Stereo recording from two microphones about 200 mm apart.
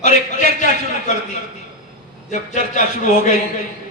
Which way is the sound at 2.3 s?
40° left (ahead or behind).